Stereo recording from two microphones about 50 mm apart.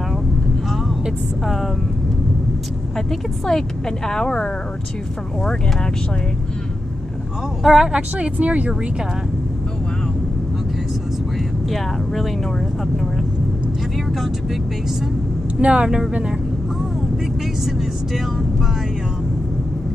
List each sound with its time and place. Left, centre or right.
1.4 s speech: centre
3.1 s speech: centre
7.6 s a woman's voice: centre
8.2 s speech: right
11.7 s speech: centre
14.2 s speech: centre
15.6 s speech: right
17.6 s speech: centre